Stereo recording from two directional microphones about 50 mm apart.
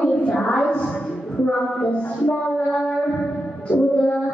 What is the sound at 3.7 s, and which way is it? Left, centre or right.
Female singing, left.